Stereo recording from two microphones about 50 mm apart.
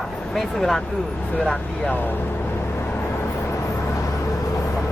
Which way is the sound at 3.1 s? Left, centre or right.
Left.